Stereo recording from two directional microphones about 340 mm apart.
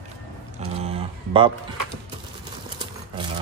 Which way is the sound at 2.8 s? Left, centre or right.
Centre.